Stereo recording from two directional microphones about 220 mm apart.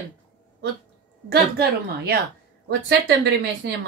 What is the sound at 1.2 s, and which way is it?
Speech, 45° right (ahead or behind).